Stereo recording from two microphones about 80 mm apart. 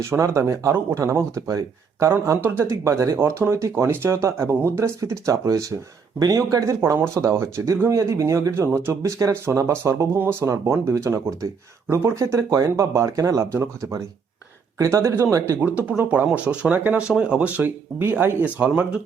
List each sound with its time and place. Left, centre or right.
0.0 s speech: right
15.6 s speech: right